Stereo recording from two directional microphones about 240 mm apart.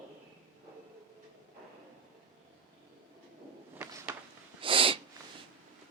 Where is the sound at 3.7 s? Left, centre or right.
Centre.